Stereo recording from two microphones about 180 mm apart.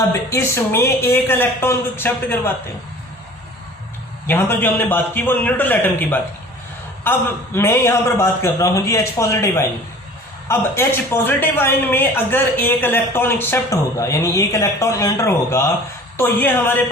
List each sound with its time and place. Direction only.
0.3 s a man's voice: 15° left (ahead or behind)
4.3 s a man's voice: 10° left (ahead or behind)